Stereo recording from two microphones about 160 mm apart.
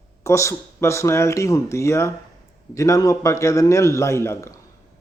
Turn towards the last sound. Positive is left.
turn(degrees=15)  # may be behind; listen again after turning